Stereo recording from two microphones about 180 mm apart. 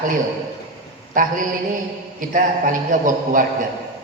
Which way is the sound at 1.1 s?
50° right (ahead or behind).